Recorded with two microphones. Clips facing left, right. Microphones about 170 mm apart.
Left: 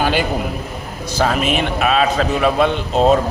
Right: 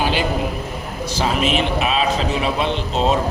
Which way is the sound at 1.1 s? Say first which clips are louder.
Left 2 dB; 50° left (ahead or behind).